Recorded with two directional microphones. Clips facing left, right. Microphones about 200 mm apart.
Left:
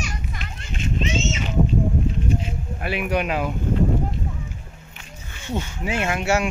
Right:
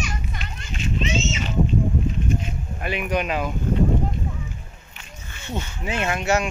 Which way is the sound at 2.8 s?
5° left (ahead or behind).